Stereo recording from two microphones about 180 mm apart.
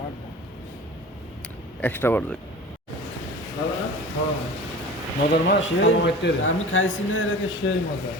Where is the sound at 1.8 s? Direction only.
10° left (ahead or behind).